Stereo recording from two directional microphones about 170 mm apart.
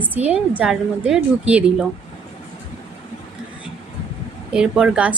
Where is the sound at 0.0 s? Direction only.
10° right (ahead or behind).